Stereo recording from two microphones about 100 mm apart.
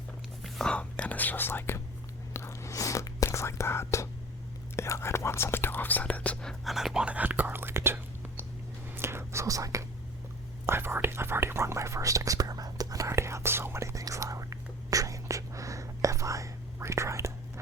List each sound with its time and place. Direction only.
0.4 s speech: 10° left (ahead or behind)
2.3 s a sound: 30° left (ahead or behind)
3.2 s speech: 30° left (ahead or behind); by 8.4 s 20° right (ahead or behind)
9.0 s whispering: 25° right (ahead or behind)
10.7 s whispering: 25° right (ahead or behind)